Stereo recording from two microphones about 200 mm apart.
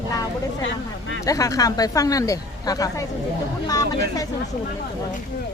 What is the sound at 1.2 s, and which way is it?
Speech, 15° left (ahead or behind).